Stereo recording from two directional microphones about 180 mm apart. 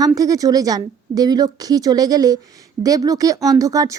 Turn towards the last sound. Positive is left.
turn(degrees=-20)  # may be behind; listen again after turning